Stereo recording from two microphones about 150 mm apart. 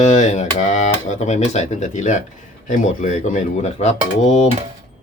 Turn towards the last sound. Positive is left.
turn(degrees=50)  # may be behind; listen again after turning